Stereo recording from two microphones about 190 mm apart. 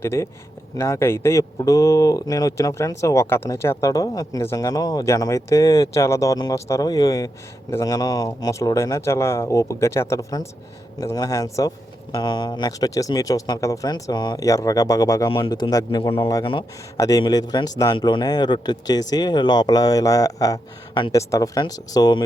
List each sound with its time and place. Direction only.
0.0 s speech: 15° left (ahead or behind)